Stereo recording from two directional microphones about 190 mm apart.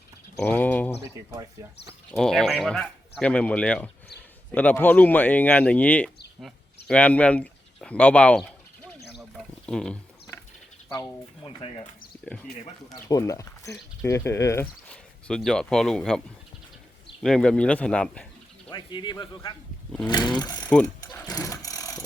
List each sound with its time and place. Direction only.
0.3 s speech: 10° left (ahead or behind)
1.1 s speech: 15° right (ahead or behind)
2.0 s speech: centre (ahead or behind)
9.6 s speech: 5° left (ahead or behind)
12.2 s speech: 5° left (ahead or behind)
12.9 s speech: 20° left (ahead or behind); by 16.2 s 5° left (ahead or behind)
17.2 s speech: 5° left (ahead or behind)
18.7 s speech: 25° left (ahead or behind)
20.8 s mechanisms: 20° left (ahead or behind)